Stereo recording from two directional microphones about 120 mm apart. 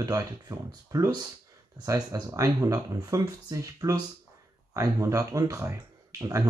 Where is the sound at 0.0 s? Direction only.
30° right (ahead or behind).